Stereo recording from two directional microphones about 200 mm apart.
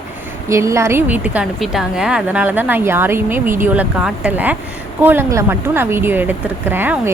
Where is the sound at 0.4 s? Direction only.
15° right (ahead or behind).